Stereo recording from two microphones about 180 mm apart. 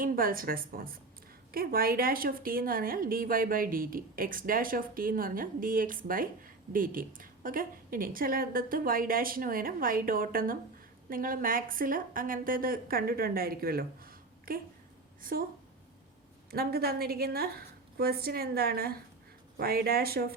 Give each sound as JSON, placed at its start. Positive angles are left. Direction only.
{"t": 0.0, "sound": "a woman's voice", "side_deg": -50}
{"t": 16.5, "sound": "a woman's voice", "side_deg": -60}